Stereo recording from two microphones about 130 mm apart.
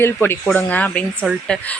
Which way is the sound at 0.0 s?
15° left (ahead or behind).